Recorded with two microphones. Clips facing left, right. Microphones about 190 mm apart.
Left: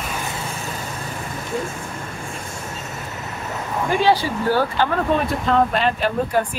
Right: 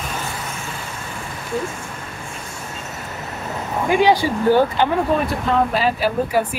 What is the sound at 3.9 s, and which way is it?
Speech, 15° right (ahead or behind).